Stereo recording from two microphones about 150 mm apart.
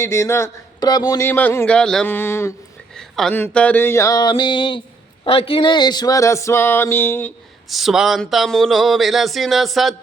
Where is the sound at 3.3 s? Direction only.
10° left (ahead or behind).